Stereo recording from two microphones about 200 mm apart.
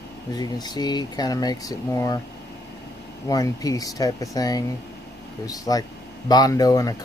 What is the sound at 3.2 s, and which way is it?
Speech, 15° left (ahead or behind).